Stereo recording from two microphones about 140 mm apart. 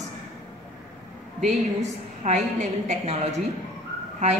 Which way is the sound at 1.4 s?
55° right (ahead or behind).